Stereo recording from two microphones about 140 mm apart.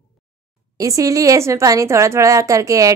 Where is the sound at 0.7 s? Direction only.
25° right (ahead or behind).